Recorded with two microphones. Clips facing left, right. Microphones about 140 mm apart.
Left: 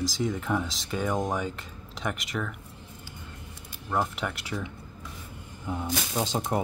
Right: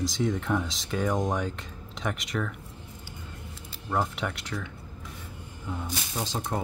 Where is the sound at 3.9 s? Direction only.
Centre (ahead or behind).